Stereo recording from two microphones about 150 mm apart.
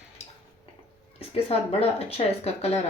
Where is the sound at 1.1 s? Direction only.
40° left (ahead or behind).